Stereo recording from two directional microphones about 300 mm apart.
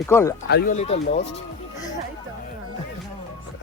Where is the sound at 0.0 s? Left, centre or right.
Centre.